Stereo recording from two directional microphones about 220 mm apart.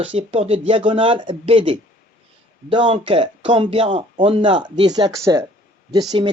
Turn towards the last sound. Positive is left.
turn(degrees=-20)  # may be behind; listen again after turning